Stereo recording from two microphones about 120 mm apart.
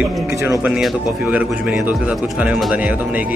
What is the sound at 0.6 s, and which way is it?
Speech, 5° right (ahead or behind).